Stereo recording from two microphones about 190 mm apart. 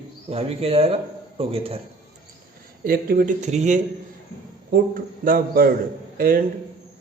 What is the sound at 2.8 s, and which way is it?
A man's voice, 50° right (ahead or behind).